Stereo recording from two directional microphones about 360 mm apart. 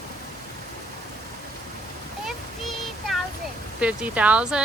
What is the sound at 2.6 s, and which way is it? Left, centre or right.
Child singing, centre.